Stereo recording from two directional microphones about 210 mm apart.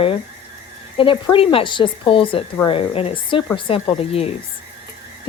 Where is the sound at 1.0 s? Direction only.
25° left (ahead or behind).